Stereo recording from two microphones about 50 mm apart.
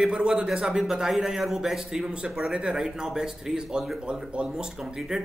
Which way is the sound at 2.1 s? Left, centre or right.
Centre.